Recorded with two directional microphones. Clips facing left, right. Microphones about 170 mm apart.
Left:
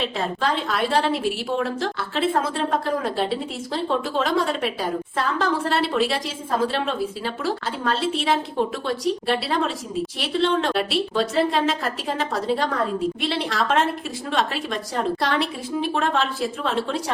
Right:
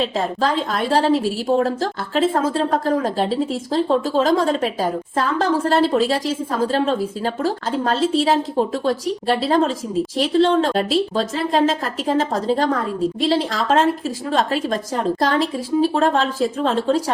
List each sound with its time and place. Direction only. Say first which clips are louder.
0.7 s a woman's voice: right 5 dB; 40° right (ahead or behind)